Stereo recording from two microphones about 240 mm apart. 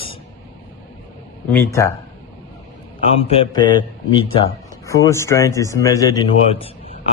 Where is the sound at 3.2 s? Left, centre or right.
Centre.